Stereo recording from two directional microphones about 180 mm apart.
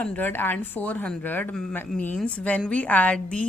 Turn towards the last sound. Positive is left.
turn(degrees=5)  # may be behind; listen again after turning